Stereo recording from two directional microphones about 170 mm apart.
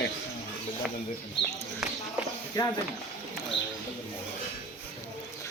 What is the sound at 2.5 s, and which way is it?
Speech, 25° left (ahead or behind).